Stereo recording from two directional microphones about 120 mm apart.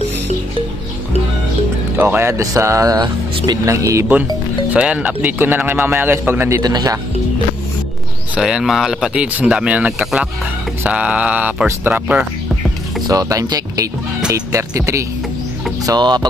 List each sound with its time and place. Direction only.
2.0 s speech: 20° right (ahead or behind)
4.1 s speech: 15° right (ahead or behind)
6.6 s speech: 35° right (ahead or behind)
8.4 s speech: 5° right (ahead or behind)
13.0 s speech: 30° right (ahead or behind)